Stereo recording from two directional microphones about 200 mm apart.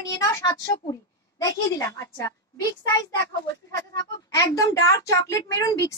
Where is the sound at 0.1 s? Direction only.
15° left (ahead or behind).